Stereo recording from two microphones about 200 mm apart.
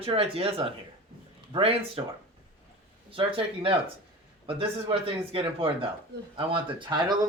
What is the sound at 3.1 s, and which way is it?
Speech, 25° right (ahead or behind).